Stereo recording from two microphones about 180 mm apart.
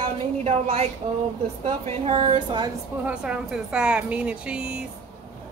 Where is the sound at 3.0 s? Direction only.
5° right (ahead or behind).